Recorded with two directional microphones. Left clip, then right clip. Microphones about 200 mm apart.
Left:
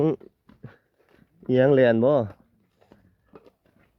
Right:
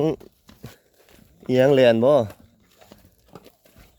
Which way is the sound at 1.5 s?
Centre (ahead or behind).